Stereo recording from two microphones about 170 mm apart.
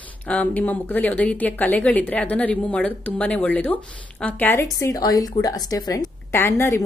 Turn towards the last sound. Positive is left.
turn(degrees=15)  # may be behind; listen again after turning